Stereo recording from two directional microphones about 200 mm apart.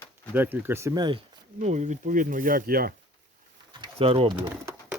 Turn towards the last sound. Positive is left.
turn(degrees=-10)  # may be behind; listen again after turning